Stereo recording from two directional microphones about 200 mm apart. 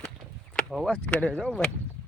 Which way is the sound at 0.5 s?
Centre (ahead or behind).